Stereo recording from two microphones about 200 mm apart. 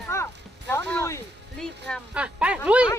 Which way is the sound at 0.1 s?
15° left (ahead or behind).